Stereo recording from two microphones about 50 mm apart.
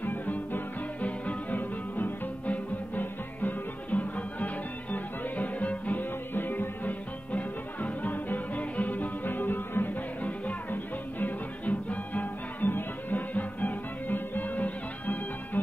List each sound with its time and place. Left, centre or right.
0.0 s music: left
6.3 s music: left